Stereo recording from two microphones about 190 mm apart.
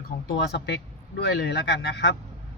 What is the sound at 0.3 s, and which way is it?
Speech, 65° left (ahead or behind).